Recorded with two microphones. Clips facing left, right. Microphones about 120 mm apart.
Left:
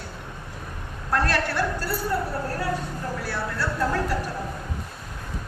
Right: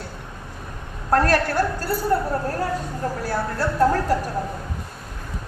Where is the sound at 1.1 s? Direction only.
45° right (ahead or behind).